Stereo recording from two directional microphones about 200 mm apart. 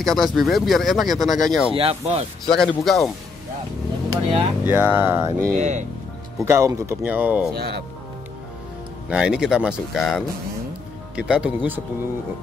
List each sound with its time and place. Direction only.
0.0 s speech: centre (ahead or behind)
1.7 s speech: 30° right (ahead or behind)
2.4 s speech: 5° left (ahead or behind)
4.1 s speech: 25° right (ahead or behind)
4.6 s speech: 10° right (ahead or behind)
5.5 s speech: 35° right (ahead or behind)
6.4 s speech: 15° right (ahead or behind)
7.5 s speech: 55° right (ahead or behind)
9.1 s speech: 5° right (ahead or behind)